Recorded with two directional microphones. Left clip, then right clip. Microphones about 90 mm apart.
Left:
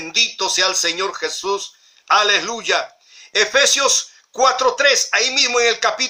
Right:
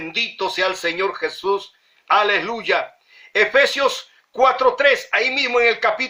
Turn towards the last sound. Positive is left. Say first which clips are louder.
# even
turn(degrees=15)  # may be behind; listen again after turning